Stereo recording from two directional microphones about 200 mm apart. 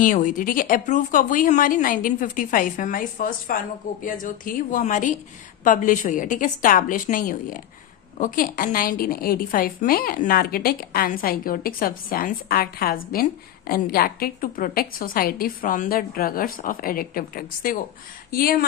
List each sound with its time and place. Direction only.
0.0 s a woman's voice: 40° left (ahead or behind)